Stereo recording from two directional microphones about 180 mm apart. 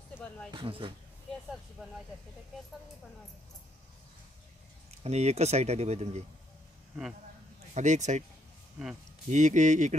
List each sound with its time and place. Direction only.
0.5 s speech: 25° right (ahead or behind)
5.0 s speech: 35° right (ahead or behind)
7.7 s speech: 40° right (ahead or behind)
9.3 s speech: 40° right (ahead or behind)